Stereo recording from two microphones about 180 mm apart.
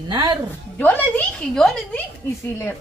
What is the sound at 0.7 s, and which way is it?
A woman's voice, 10° left (ahead or behind).